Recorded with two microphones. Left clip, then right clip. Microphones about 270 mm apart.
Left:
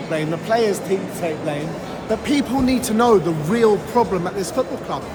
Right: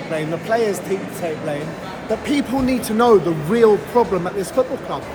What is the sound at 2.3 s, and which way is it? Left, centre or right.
Speech, centre.